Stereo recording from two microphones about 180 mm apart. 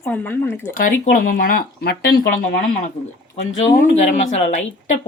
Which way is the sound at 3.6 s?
40° left (ahead or behind).